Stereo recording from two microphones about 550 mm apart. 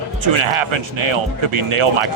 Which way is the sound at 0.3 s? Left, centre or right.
Right.